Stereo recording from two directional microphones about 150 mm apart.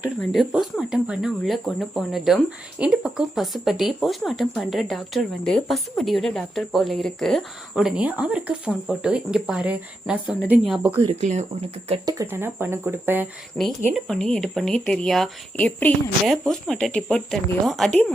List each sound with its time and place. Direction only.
0.2 s speech: centre (ahead or behind)
11.1 s speech: 50° right (ahead or behind)
12.0 s speech: 20° right (ahead or behind)
13.9 s speech: 5° left (ahead or behind)